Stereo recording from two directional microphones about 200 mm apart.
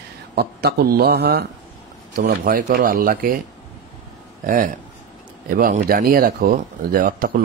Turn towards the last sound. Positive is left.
turn(degrees=-45)  # may be behind; listen again after turning